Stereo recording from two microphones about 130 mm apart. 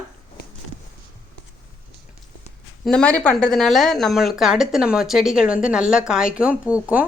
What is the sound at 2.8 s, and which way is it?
Speech, 10° left (ahead or behind).